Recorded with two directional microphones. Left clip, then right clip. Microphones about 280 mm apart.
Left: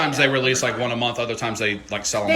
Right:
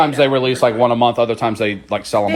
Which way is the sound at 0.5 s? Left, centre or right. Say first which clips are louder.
Right 8 dB; centre.